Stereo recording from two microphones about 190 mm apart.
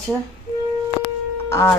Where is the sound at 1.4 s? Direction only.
15° left (ahead or behind).